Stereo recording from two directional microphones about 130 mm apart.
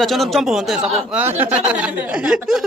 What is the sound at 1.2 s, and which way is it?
A woman's voice, 15° right (ahead or behind).